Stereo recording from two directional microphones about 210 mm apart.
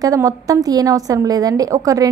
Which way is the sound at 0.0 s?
15° right (ahead or behind).